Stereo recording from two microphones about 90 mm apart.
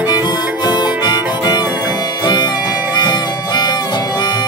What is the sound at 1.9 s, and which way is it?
Music, 50° left (ahead or behind).